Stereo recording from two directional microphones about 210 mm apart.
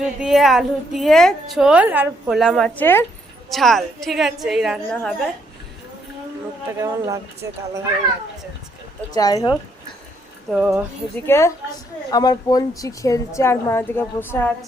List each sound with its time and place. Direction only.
0.0 s a woman's voice: centre (ahead or behind)
6.7 s speech: 15° right (ahead or behind)
9.1 s a woman's voice: 20° left (ahead or behind)
10.5 s a woman's voice: 5° right (ahead or behind)
11.3 s a woman's voice: 15° left (ahead or behind)